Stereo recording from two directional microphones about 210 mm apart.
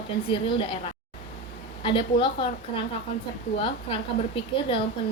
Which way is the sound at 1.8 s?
25° left (ahead or behind).